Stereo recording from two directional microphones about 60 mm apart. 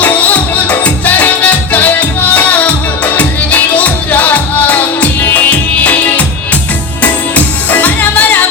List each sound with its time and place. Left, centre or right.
0.0 s music: left